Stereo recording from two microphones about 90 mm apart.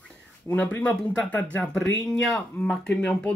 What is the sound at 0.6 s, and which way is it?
Speech, 15° left (ahead or behind).